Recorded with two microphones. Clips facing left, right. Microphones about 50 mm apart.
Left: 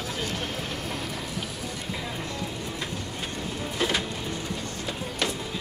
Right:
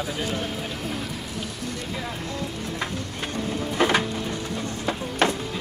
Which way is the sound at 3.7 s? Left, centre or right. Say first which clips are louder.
Right 6 dB; right.